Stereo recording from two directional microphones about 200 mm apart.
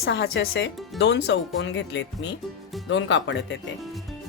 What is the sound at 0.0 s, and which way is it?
Speech, 65° left (ahead or behind).